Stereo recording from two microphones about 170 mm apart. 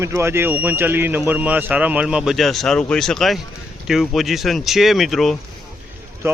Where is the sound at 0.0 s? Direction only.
15° right (ahead or behind); by 5.4 s centre (ahead or behind).